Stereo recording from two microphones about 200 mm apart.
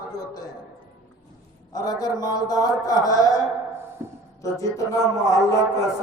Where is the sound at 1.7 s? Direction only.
20° left (ahead or behind).